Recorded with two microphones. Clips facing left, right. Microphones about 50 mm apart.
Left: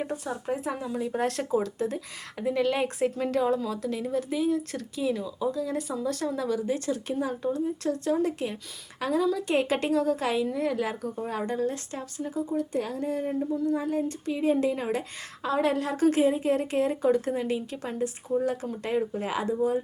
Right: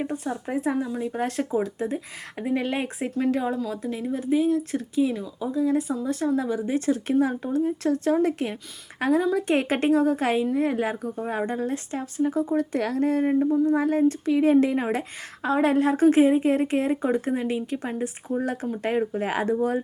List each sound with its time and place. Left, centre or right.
0.0 s speech: right
0.8 s speech: centre
1.5 s speech: centre
2.8 s a woman's voice: centre; by 12.4 s right
12.5 s speech: right
13.4 s a woman's voice: right
13.7 s a sound: right
14.0 s a woman's voice: right
19.5 s speech: right